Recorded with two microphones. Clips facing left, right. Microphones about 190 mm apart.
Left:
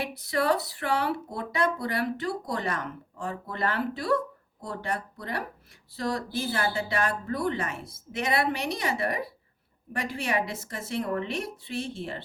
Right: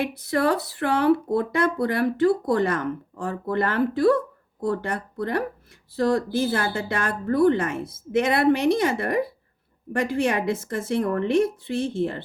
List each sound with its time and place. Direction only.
0.2 s speech: 55° right (ahead or behind)